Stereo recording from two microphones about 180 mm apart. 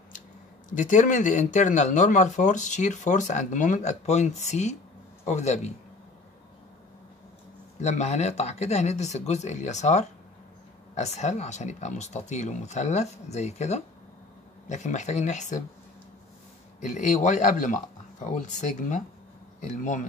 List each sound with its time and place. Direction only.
0.7 s speech: 45° left (ahead or behind)
7.8 s speech: 40° left (ahead or behind)
16.8 s speech: 40° left (ahead or behind)